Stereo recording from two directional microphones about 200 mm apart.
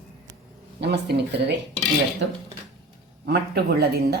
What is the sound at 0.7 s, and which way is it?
Speech, 55° right (ahead or behind).